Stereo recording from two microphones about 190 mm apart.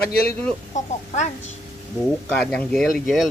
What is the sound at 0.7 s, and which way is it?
Speech, 40° left (ahead or behind).